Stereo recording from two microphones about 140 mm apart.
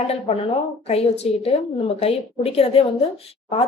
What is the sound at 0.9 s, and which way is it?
Speech, 45° left (ahead or behind).